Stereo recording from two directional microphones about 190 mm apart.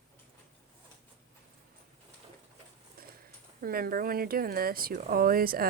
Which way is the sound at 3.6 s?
50° right (ahead or behind).